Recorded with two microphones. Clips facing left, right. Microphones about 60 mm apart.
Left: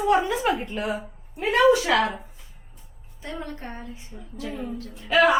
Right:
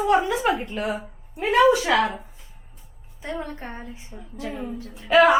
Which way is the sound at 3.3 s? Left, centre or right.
Centre.